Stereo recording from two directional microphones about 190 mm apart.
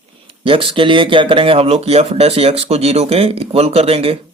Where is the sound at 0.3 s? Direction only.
30° right (ahead or behind).